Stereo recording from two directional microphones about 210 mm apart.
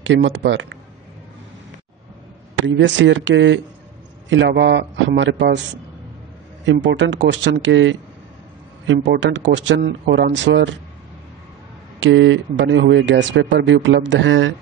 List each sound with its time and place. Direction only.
0.0 s speech: 60° right (ahead or behind)
2.6 s speech: 60° right (ahead or behind)
6.6 s speech: 60° right (ahead or behind)
12.0 s speech: 65° right (ahead or behind)